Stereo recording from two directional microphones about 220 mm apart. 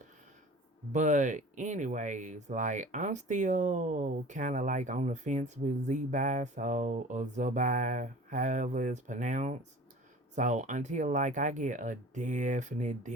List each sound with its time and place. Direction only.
0.9 s speech: 35° right (ahead or behind)